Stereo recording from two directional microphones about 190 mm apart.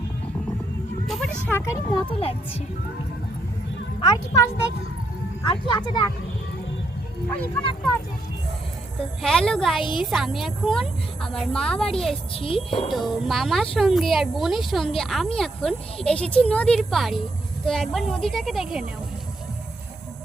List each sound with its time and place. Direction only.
1.0 s vehicle: centre (ahead or behind)
1.5 s a child's voice: 15° left (ahead or behind)
4.0 s a child's voice: 20° left (ahead or behind)
9.2 s speech: 5° left (ahead or behind)
9.8 s a child's voice: 25° left (ahead or behind)
10.1 s speech: centre (ahead or behind)
12.3 s a child's voice: 30° left (ahead or behind)
12.9 s speech: centre (ahead or behind)